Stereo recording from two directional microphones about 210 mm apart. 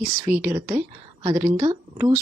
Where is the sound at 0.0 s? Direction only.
15° right (ahead or behind).